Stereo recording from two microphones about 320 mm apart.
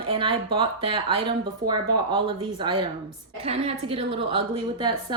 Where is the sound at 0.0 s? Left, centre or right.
Centre.